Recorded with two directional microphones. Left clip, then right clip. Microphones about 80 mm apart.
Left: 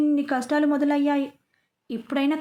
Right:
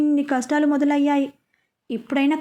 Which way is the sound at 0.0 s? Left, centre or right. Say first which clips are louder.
Right 2 dB; centre.